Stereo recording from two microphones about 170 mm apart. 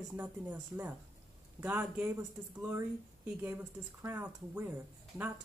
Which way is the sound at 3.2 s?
10° right (ahead or behind).